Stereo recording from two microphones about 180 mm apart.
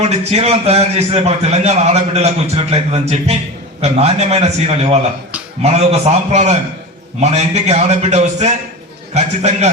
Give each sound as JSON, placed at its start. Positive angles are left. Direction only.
{"t": 0.0, "sound": "a man's voice", "side_deg": -35}